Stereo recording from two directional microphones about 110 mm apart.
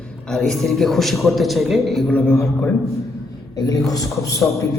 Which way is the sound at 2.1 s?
15° left (ahead or behind).